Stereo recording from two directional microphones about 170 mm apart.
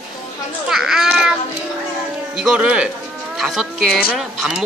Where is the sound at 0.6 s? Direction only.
Centre (ahead or behind).